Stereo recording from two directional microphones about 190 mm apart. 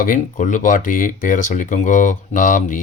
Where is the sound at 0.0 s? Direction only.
45° left (ahead or behind).